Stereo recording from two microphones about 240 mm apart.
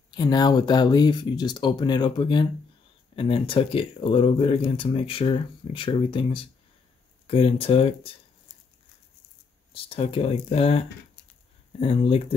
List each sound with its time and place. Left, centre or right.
0.1 s speech: centre
9.7 s speech: left
11.8 s speech: left